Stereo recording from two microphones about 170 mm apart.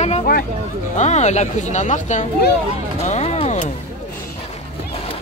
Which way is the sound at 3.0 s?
40° left (ahead or behind).